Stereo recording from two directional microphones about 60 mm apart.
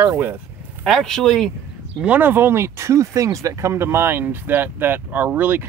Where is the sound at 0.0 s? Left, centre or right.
Right.